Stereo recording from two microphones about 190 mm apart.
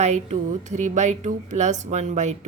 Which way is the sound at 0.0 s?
35° right (ahead or behind).